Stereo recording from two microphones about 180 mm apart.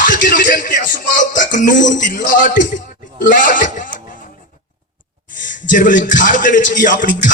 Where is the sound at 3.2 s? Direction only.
50° left (ahead or behind).